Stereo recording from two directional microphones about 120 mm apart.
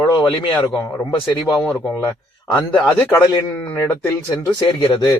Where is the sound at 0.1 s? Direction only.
40° left (ahead or behind).